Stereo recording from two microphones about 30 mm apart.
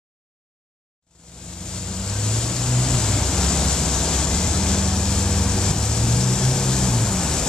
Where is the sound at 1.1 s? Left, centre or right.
Left.